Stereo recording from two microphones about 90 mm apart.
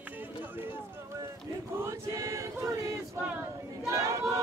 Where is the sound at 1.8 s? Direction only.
30° right (ahead or behind).